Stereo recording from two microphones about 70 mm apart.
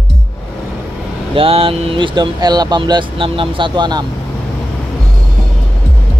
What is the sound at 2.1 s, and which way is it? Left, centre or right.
Speech, right.